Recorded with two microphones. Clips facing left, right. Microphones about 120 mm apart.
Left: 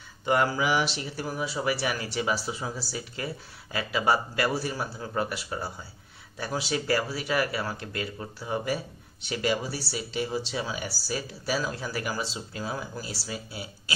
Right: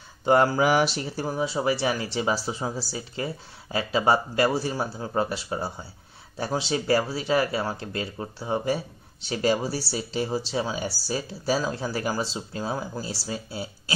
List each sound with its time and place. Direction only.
0.2 s speech: 35° right (ahead or behind)